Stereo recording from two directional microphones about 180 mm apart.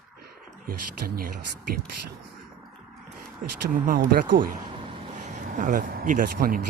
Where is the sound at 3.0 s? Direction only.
55° right (ahead or behind).